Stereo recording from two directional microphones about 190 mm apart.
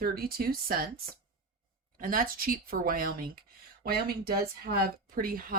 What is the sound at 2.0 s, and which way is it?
Speech, 50° right (ahead or behind).